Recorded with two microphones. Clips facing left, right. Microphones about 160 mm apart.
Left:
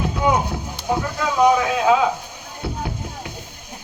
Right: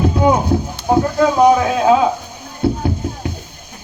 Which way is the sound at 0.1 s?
40° right (ahead or behind).